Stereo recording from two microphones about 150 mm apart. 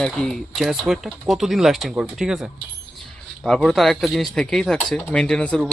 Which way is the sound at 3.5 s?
5° left (ahead or behind).